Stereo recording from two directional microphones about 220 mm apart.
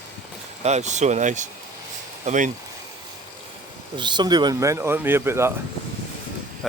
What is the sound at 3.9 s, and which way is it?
Speech, 20° right (ahead or behind).